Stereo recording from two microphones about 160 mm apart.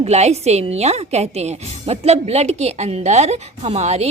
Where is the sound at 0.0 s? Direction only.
45° right (ahead or behind).